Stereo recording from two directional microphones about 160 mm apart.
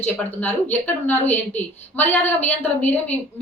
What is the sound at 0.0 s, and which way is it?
A woman's voice, 10° left (ahead or behind).